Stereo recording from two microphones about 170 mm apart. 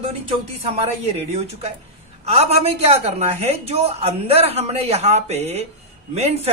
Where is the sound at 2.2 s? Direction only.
35° right (ahead or behind).